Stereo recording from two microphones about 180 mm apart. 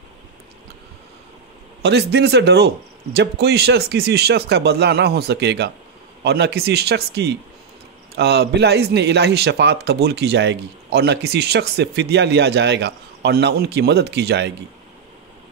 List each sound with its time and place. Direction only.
1.8 s a man's voice: 70° right (ahead or behind)